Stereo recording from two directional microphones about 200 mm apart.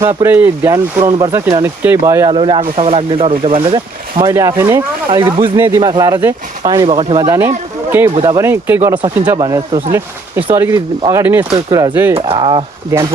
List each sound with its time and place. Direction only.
0.0 s speech: 15° right (ahead or behind)
2.4 s speech: 25° right (ahead or behind)
4.2 s speech: 15° right (ahead or behind)
5.1 s speech: 25° right (ahead or behind)
5.5 s speech: 10° right (ahead or behind)
9.9 s speech: 10° right (ahead or behind)
12.1 s speech: 25° right (ahead or behind)